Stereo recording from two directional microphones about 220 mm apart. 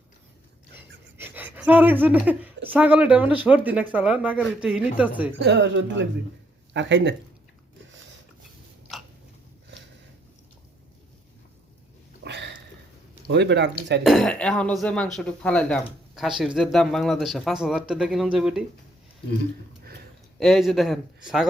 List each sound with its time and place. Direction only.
0.8 s a woman's voice: 10° right (ahead or behind)
5.4 s speech: 55° right (ahead or behind)
12.2 s a sound: 50° right (ahead or behind)
13.2 s speech: 50° right (ahead or behind)
14.0 s speech: centre (ahead or behind)
20.4 s speech: centre (ahead or behind)